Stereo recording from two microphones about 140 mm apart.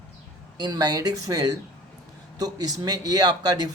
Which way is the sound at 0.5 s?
30° right (ahead or behind).